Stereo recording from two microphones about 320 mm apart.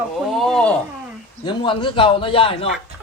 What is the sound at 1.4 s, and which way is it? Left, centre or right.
A man's voice, centre.